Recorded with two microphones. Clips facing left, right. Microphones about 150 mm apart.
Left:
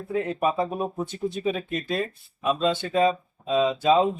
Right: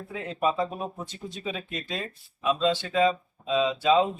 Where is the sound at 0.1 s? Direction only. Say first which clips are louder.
Left 3 dB; 45° left (ahead or behind).